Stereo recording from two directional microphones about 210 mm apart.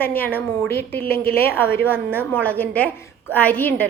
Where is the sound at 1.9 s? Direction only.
10° right (ahead or behind).